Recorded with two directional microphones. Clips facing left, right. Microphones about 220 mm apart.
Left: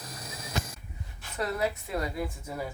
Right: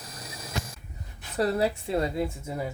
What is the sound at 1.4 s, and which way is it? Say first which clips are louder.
Speech: right 5 dB; 30° right (ahead or behind).